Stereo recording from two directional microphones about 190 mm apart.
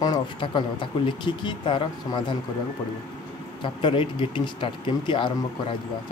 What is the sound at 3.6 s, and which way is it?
Speech, 25° left (ahead or behind).